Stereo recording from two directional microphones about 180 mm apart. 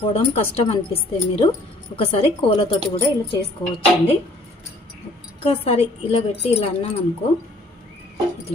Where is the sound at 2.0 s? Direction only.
30° left (ahead or behind).